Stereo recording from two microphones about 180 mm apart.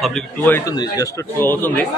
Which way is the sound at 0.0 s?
5° left (ahead or behind).